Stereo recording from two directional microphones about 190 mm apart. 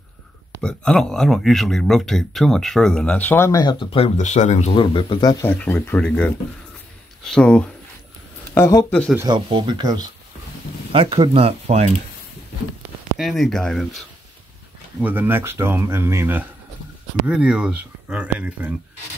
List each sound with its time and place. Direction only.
0.6 s speech: 5° left (ahead or behind)
3.9 s speech: 35° left (ahead or behind)
4.7 s speech: 25° left (ahead or behind)
5.5 s speech: 10° left (ahead or behind)
9.1 s speech: 20° right (ahead or behind)
13.2 s speech: centre (ahead or behind)
15.0 s speech: 10° right (ahead or behind)